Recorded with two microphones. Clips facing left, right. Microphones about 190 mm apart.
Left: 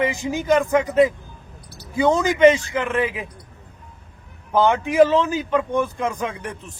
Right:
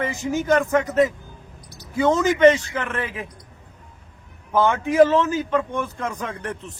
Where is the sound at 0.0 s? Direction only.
15° left (ahead or behind).